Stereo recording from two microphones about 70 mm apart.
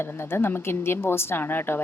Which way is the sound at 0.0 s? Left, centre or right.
Left.